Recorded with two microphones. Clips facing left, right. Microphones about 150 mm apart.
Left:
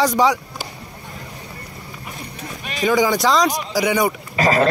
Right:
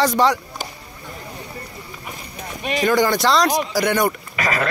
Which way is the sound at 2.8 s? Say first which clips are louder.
Left 1 dB; centre (ahead or behind).